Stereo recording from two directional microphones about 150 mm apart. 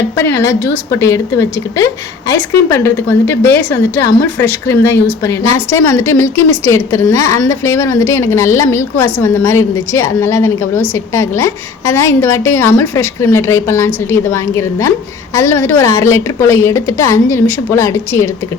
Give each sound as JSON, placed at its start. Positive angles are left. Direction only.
{"t": 0.2, "sound": "a woman's voice", "side_deg": 20}